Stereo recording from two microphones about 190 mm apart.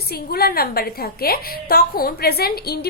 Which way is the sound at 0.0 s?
55° left (ahead or behind).